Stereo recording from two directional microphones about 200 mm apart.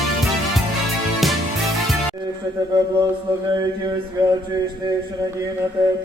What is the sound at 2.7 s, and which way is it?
Mantra, 20° right (ahead or behind).